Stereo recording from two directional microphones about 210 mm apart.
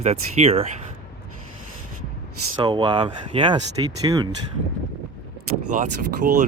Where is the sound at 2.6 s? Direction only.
20° right (ahead or behind).